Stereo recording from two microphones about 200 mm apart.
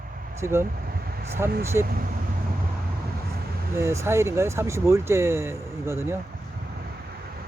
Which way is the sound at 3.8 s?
15° right (ahead or behind).